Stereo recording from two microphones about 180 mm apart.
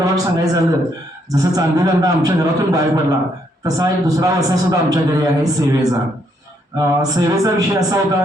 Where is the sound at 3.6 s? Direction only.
20° right (ahead or behind).